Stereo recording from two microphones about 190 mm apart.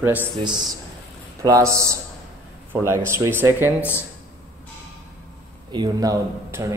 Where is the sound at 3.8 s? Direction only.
10° left (ahead or behind).